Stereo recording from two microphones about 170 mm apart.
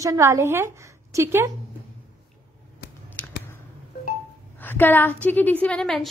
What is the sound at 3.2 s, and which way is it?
Scissors, 10° left (ahead or behind).